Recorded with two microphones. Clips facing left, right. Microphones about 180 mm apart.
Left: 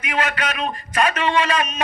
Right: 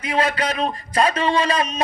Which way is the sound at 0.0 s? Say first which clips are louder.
Right 2 dB; 30° right (ahead or behind).